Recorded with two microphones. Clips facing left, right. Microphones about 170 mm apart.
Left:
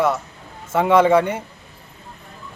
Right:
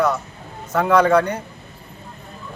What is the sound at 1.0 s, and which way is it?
Speech, 5° left (ahead or behind).